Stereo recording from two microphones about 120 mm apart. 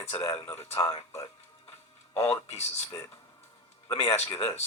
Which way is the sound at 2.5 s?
65° left (ahead or behind).